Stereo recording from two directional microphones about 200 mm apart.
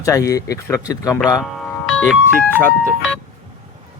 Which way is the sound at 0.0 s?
15° left (ahead or behind).